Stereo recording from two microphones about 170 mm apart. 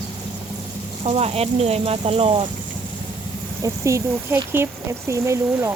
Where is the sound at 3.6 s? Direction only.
15° right (ahead or behind).